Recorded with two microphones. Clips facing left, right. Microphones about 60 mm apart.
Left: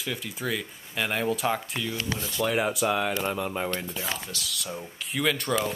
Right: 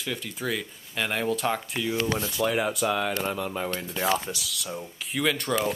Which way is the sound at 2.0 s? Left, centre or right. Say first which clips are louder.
Right 5 dB; right.